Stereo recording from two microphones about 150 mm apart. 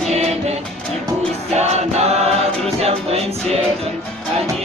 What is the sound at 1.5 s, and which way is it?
Choir, 45° right (ahead or behind).